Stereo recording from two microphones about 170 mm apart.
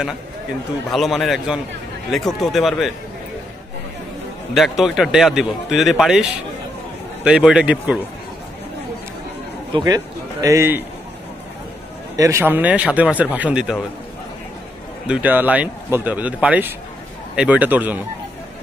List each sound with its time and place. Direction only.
0.9 s speech: centre (ahead or behind)
4.6 s speech: centre (ahead or behind)
7.2 s speech: 5° right (ahead or behind)
9.8 s a man's voice: 20° right (ahead or behind)
12.2 s speech: 15° right (ahead or behind)
15.0 s speech: 10° right (ahead or behind)